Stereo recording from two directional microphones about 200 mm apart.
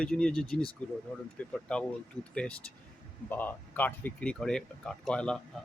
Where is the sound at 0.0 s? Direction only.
5° left (ahead or behind).